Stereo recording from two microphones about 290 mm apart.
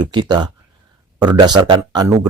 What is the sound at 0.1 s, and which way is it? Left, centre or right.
Speech, centre.